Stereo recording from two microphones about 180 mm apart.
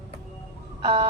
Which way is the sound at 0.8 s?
25° right (ahead or behind).